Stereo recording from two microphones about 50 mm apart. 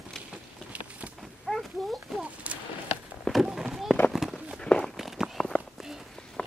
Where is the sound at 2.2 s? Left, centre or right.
Right.